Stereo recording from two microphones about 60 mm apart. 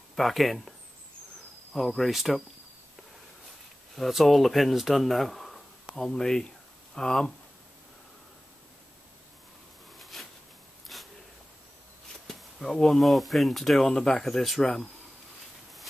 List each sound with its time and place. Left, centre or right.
0.1 s speech: centre
3.9 s speech: centre
9.9 s a sound: centre
12.3 s speech: centre